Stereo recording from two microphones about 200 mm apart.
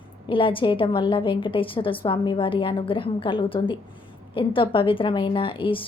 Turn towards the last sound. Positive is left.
turn(degrees=25)  # may be behind; listen again after turning